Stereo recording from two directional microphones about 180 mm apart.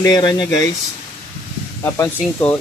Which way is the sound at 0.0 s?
20° left (ahead or behind).